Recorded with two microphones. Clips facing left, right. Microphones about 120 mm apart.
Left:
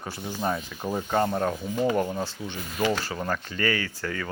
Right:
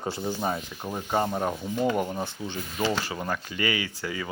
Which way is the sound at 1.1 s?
10° right (ahead or behind).